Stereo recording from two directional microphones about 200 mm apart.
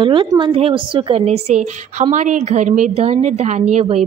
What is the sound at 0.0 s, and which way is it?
A woman's voice, 25° right (ahead or behind).